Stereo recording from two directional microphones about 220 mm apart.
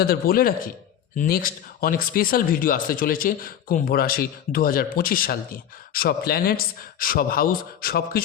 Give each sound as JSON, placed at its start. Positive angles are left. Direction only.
{"t": 0.0, "sound": "a man's voice", "side_deg": 45}